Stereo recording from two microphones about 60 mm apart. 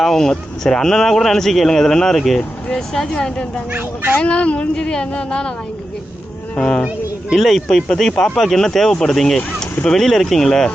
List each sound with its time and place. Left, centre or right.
0.0 s speech: centre
3.7 s speech: right
4.1 s a woman's voice: centre
6.6 s speech: centre